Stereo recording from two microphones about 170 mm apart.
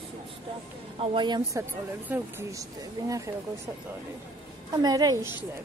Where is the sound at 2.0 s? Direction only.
10° right (ahead or behind).